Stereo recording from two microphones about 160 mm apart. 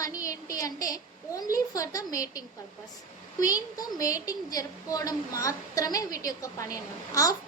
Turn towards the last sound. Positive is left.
turn(degrees=20)  # may be behind; listen again after turning